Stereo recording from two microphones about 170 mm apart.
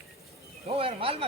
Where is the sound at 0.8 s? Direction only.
35° right (ahead or behind).